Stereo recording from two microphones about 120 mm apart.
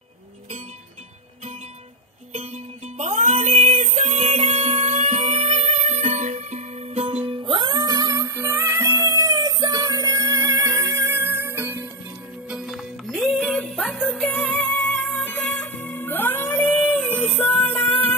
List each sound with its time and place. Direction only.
2.3 s music: 65° right (ahead or behind)
7.2 s music: 45° right (ahead or behind)
8.4 s music: 15° right (ahead or behind)
12.4 s music: 5° right (ahead or behind); by 18.1 s 10° left (ahead or behind)